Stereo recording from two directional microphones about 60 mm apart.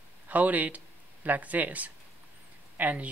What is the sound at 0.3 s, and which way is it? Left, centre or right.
Speech, right.